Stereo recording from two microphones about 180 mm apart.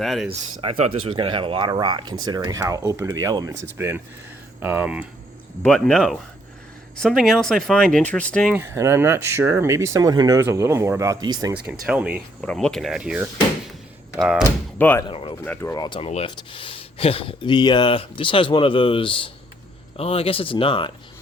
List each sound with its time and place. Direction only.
0.0 s speech: centre (ahead or behind)
0.3 s speech: 30° right (ahead or behind); by 5.0 s 5° right (ahead or behind)
5.6 s speech: 5° left (ahead or behind)
8.5 s speech: 15° right (ahead or behind)
11.9 s speech: 5° right (ahead or behind)
12.4 s speech: 5° left (ahead or behind)
14.4 s speech: 15° left (ahead or behind)
15.0 s speech: 30° left (ahead or behind)
15.4 s speech: 15° left (ahead or behind)